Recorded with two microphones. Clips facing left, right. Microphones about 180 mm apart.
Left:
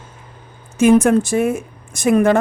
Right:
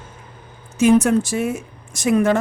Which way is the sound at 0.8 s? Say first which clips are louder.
Left 2 dB; 55° left (ahead or behind).